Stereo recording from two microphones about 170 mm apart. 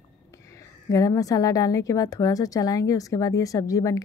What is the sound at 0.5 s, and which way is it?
Speech, 20° left (ahead or behind).